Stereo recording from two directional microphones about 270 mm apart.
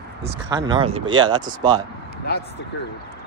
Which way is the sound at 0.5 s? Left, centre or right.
Centre.